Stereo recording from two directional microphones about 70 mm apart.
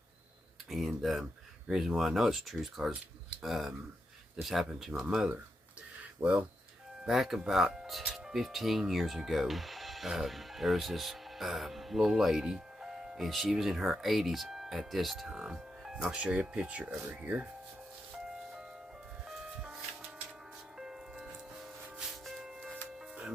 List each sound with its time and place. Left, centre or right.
0.9 s speech: centre
6.0 s a sound: centre
7.0 s speech: centre
15.3 s music: centre
16.0 s speech: centre
18.2 s music: centre